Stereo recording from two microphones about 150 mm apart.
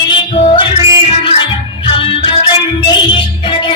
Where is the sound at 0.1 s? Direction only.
35° left (ahead or behind).